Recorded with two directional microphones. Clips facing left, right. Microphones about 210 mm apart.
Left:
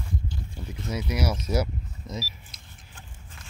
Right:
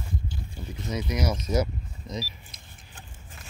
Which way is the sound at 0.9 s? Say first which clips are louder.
Even; 10° left (ahead or behind).